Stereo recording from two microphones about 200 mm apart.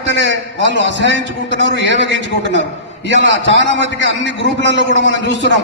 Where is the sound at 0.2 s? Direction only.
65° right (ahead or behind).